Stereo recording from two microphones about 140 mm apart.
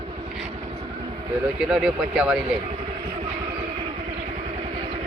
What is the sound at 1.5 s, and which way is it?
Speech, 5° right (ahead or behind).